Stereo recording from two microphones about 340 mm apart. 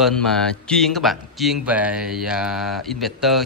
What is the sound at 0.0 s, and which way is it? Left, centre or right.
Speech, centre.